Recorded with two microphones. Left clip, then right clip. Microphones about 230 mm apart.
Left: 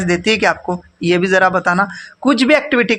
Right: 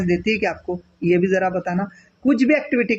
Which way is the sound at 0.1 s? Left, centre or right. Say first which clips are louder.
Left 7 dB; left.